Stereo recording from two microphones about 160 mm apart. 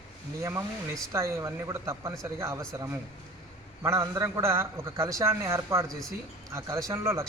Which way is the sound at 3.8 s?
20° right (ahead or behind).